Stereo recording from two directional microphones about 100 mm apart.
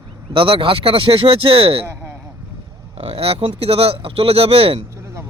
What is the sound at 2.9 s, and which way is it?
Speech, 70° right (ahead or behind).